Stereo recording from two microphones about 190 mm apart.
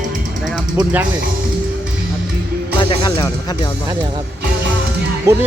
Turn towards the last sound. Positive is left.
turn(degrees=-15)  # may be behind; listen again after turning